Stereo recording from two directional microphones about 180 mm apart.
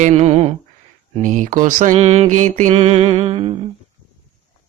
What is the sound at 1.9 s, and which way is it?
Music, 35° right (ahead or behind).